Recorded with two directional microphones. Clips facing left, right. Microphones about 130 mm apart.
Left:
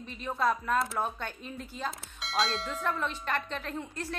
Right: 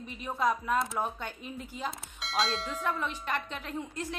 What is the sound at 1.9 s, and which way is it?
Speech, centre (ahead or behind).